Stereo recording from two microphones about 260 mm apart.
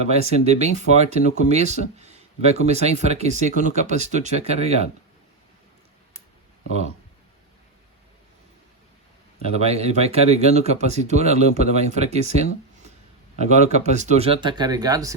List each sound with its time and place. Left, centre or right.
0.3 s speech: right
9.4 s speech: right